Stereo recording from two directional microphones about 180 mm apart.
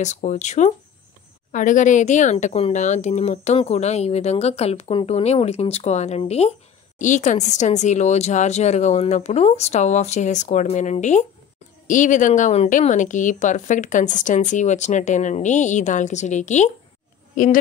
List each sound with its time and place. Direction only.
0.0 s a woman's voice: 40° left (ahead or behind)